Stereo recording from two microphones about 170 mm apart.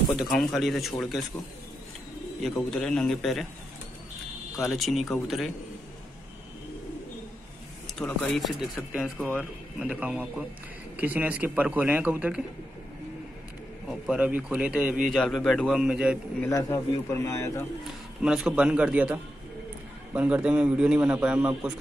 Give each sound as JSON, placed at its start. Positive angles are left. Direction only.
{"t": 0.1, "sound": "a man's voice", "side_deg": 0}
{"t": 2.4, "sound": "a man's voice", "side_deg": 5}
{"t": 4.6, "sound": "a man's voice", "side_deg": 0}
{"t": 7.8, "sound": "a sound", "side_deg": 10}
{"t": 8.3, "sound": "a man's voice", "side_deg": 0}
{"t": 13.8, "sound": "a man's voice", "side_deg": -5}
{"t": 16.3, "sound": "speech", "side_deg": 15}
{"t": 18.2, "sound": "a man's voice", "side_deg": -5}